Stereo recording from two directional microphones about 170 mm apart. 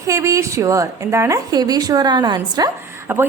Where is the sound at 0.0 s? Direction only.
20° right (ahead or behind).